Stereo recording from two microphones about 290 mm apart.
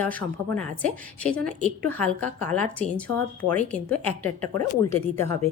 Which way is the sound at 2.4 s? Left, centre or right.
Centre.